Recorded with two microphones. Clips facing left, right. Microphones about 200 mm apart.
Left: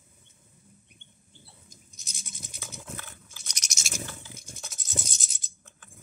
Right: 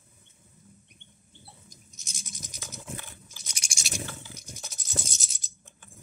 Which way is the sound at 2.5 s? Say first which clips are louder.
Left 1 dB; 5° left (ahead or behind).